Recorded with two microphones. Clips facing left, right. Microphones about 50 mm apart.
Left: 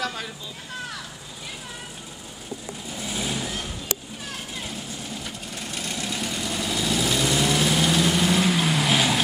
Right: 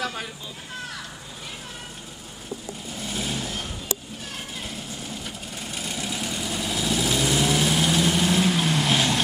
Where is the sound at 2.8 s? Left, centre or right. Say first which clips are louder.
Left 1 dB; centre.